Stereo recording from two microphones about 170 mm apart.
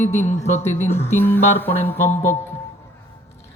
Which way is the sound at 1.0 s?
15° left (ahead or behind).